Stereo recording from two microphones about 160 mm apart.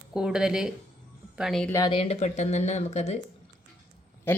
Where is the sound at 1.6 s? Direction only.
20° left (ahead or behind).